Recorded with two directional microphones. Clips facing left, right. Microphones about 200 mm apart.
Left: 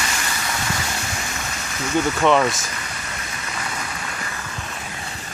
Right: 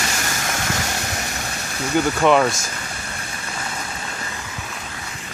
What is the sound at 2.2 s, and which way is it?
Speech, 5° right (ahead or behind).